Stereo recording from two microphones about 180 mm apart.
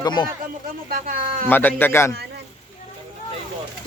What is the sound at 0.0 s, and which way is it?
Speech, 20° left (ahead or behind).